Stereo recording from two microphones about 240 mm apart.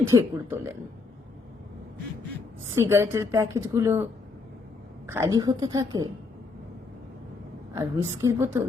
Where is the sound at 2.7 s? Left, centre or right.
Centre.